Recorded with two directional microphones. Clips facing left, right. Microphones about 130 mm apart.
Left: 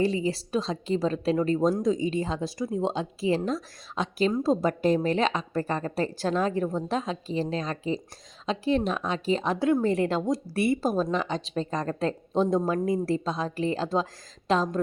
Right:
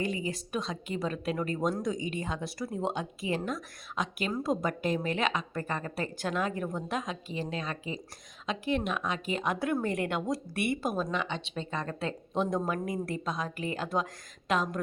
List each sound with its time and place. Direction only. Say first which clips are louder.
0.0 s speech: left 7 dB; 30° left (ahead or behind)